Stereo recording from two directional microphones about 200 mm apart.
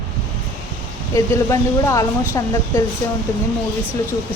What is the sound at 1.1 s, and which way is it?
Speech, 15° left (ahead or behind).